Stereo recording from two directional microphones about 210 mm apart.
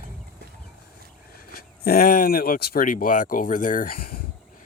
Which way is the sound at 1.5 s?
45° left (ahead or behind).